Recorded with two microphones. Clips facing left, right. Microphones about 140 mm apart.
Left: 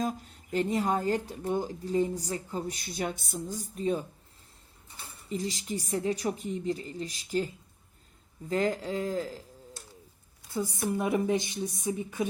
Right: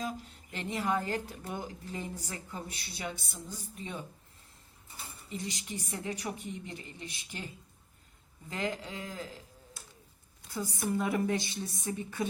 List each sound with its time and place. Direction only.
0.0 s speech: 45° left (ahead or behind)
5.3 s speech: 30° left (ahead or behind)
8.4 s speech: 40° left (ahead or behind)
10.5 s a woman's voice: 25° left (ahead or behind)